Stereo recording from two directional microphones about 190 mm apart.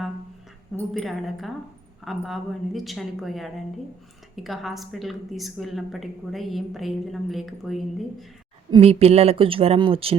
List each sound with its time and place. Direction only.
0.9 s a woman's voice: centre (ahead or behind)
8.7 s speech: 30° right (ahead or behind)